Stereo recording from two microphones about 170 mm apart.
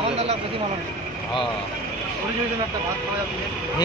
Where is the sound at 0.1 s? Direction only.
40° right (ahead or behind).